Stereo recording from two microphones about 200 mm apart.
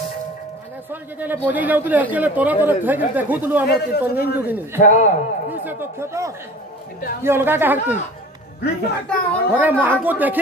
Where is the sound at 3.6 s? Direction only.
55° left (ahead or behind).